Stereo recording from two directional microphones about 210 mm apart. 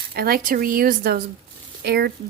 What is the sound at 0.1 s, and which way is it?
Speech, 45° right (ahead or behind).